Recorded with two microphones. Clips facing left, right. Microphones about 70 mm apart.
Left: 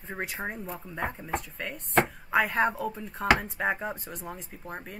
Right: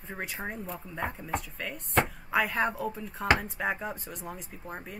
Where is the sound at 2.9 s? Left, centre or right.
Centre.